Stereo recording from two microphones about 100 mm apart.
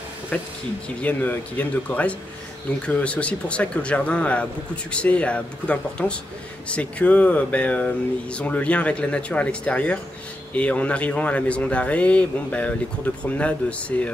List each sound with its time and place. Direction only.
0.3 s a man's voice: 10° left (ahead or behind)